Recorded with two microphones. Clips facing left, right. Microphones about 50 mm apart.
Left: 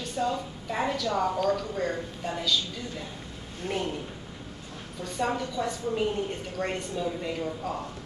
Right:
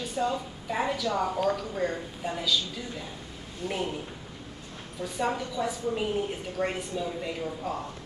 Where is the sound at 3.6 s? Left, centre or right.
Left.